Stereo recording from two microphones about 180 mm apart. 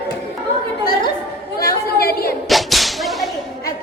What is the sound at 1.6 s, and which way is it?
Chatter, 60° left (ahead or behind).